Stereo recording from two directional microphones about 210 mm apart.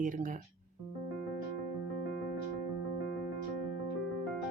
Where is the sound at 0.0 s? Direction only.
40° right (ahead or behind).